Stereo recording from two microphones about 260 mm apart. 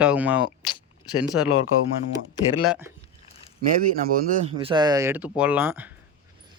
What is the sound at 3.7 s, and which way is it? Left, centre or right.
Speech, right.